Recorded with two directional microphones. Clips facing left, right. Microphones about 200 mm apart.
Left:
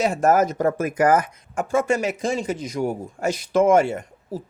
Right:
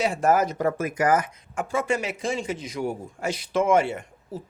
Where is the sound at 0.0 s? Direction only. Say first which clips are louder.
Left 3 dB; 45° left (ahead or behind).